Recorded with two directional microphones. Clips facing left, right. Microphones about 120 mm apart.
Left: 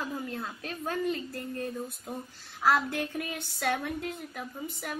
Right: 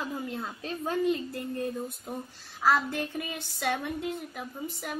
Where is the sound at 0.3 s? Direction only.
15° right (ahead or behind).